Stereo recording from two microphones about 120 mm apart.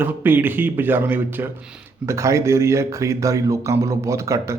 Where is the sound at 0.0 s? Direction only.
15° right (ahead or behind).